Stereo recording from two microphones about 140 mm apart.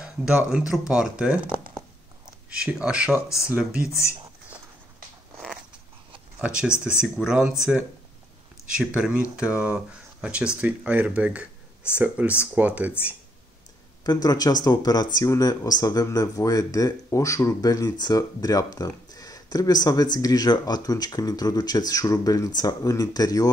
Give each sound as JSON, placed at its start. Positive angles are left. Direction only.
{"t": 0.0, "sound": "speech", "side_deg": -5}
{"t": 2.6, "sound": "speech", "side_deg": -5}
{"t": 4.0, "sound": "a sound", "side_deg": -10}
{"t": 6.1, "sound": "a sound", "side_deg": -10}
{"t": 7.2, "sound": "speech", "side_deg": -5}
{"t": 8.7, "sound": "speech", "side_deg": -5}
{"t": 14.0, "sound": "speech", "side_deg": 30}